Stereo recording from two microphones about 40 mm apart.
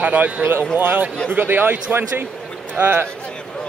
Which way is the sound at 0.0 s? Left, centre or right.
Right.